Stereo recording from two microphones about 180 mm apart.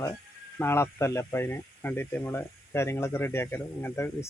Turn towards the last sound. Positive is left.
turn(degrees=10)  # may be behind; listen again after turning